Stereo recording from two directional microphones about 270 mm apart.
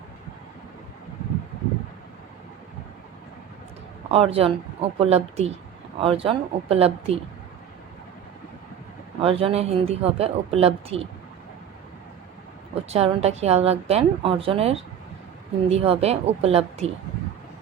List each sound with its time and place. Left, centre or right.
4.1 s speech: right
9.2 s speech: right
12.9 s speech: right